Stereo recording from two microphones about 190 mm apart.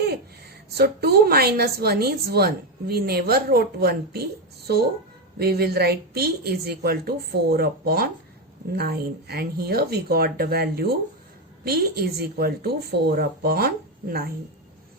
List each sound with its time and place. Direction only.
0.7 s a woman's voice: 55° right (ahead or behind)